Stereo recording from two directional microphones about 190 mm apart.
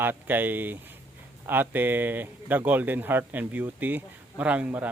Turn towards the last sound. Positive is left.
turn(degrees=-10)  # may be behind; listen again after turning